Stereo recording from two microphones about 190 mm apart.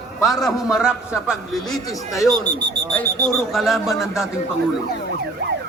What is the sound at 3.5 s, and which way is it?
Speech, centre (ahead or behind).